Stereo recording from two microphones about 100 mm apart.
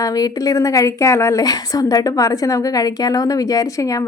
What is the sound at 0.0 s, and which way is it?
A woman's voice, 35° left (ahead or behind).